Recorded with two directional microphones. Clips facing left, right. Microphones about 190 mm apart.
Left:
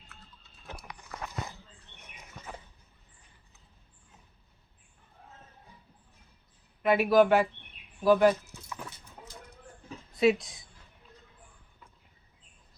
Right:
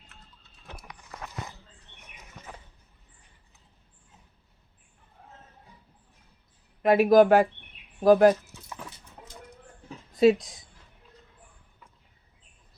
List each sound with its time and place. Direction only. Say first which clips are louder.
6.8 s speech: right 4 dB; 40° right (ahead or behind)
10.2 s speech: right 5 dB; 40° right (ahead or behind)